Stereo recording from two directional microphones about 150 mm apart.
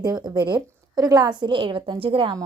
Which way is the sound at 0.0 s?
30° right (ahead or behind).